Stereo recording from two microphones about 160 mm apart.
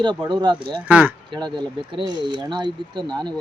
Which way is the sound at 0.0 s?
30° right (ahead or behind).